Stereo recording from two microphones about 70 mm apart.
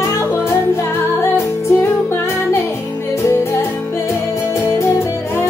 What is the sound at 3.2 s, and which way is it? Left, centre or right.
Music, left.